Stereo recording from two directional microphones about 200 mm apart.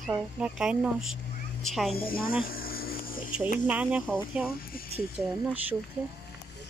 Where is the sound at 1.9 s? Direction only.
45° left (ahead or behind).